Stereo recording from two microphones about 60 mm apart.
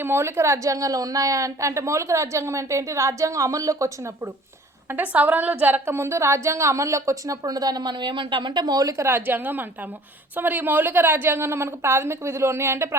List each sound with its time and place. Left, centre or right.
0.0 s a woman's voice: right
0.7 s a woman's voice: right
4.9 s a woman's voice: right
5.8 s a woman's voice: right
8.7 s a woman's voice: right
9.0 s a woman's voice: right